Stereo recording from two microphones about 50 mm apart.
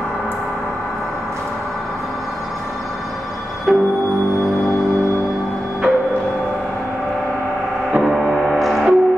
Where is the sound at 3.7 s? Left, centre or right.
Centre.